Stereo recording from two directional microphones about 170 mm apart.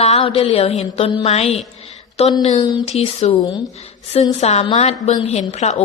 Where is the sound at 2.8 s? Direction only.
40° left (ahead or behind).